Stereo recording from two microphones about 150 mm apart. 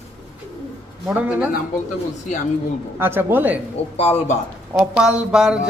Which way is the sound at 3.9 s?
45° left (ahead or behind).